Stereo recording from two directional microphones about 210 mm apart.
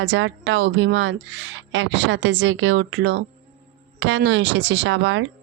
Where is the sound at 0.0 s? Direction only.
60° right (ahead or behind).